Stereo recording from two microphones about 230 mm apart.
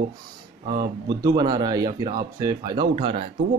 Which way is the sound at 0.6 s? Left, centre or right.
Right.